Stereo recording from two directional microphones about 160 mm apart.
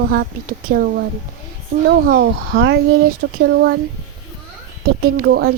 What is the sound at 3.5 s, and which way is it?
Speech, 90° right.